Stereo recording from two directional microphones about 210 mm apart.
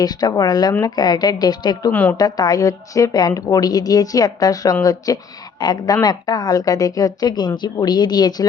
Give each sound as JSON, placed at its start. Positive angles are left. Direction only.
{"t": 0.0, "sound": "a woman's voice", "side_deg": 20}
{"t": 1.9, "sound": "a woman's voice", "side_deg": 10}